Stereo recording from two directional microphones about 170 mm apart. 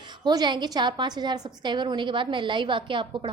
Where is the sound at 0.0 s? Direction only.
25° right (ahead or behind).